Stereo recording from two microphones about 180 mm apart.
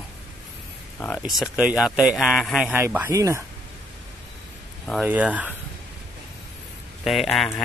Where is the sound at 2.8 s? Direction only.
10° right (ahead or behind).